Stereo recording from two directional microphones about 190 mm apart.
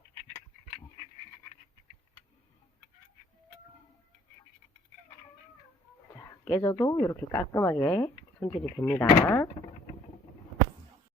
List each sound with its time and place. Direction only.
6.1 s speech: 15° left (ahead or behind)